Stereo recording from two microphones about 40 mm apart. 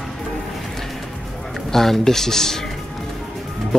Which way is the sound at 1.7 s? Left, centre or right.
Centre.